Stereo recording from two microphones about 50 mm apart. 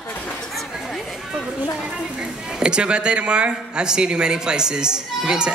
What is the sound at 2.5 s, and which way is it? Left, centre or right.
Speech, centre.